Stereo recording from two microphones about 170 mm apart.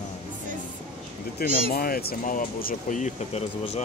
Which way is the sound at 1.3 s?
60° left (ahead or behind).